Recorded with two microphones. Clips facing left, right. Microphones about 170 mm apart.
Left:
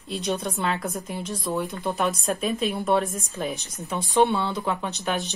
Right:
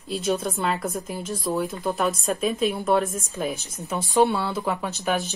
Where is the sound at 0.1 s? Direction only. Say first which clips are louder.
Right 3 dB; centre (ahead or behind).